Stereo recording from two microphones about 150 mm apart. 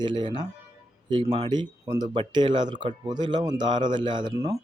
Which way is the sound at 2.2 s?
30° right (ahead or behind).